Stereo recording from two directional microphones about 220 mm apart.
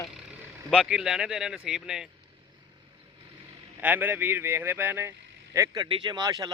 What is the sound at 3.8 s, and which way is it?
Speech, 10° right (ahead or behind).